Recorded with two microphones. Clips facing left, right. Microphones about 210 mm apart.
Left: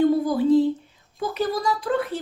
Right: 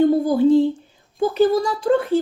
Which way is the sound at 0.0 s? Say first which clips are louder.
Right 4 dB; 25° right (ahead or behind).